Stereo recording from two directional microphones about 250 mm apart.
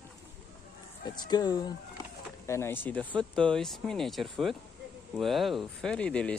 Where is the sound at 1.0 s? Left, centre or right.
Centre.